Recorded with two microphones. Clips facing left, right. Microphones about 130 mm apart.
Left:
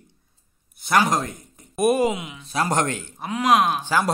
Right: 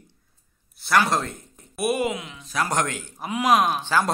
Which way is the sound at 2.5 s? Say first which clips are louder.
Left 2 dB; 25° left (ahead or behind).